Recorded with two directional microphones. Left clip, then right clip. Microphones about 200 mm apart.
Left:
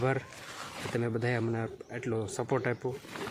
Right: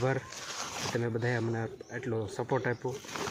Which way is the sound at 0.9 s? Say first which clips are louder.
Left 1 dB; 10° left (ahead or behind).